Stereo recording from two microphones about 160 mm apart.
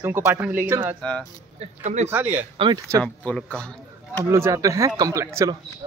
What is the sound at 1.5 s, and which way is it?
Speech, 45° right (ahead or behind).